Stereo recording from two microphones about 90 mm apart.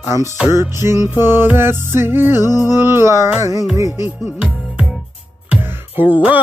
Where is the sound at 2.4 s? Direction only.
40° left (ahead or behind).